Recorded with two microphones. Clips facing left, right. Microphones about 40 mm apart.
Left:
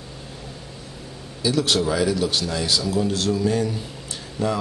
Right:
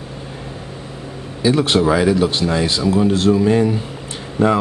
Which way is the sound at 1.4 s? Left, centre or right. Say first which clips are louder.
Right 6 dB; right.